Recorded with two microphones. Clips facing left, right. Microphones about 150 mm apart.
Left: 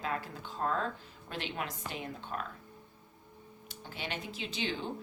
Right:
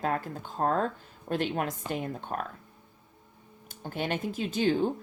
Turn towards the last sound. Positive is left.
turn(degrees=-45)  # may be behind; listen again after turning